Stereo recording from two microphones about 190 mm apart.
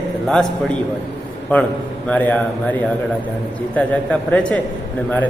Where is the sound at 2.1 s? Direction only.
10° left (ahead or behind).